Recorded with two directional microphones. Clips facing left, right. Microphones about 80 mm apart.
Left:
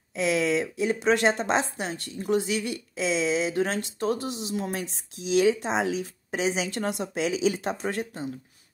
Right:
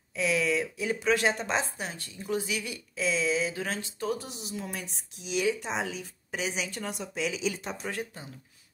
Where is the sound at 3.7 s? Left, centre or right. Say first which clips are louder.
Left 5 dB; left.